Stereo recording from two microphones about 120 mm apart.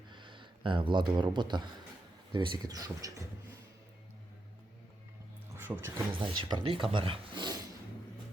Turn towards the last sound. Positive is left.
turn(degrees=-45)  # may be behind; listen again after turning